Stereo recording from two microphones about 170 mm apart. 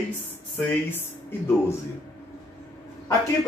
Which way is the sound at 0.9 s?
10° left (ahead or behind).